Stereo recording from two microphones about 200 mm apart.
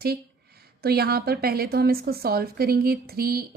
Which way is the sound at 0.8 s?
50° right (ahead or behind).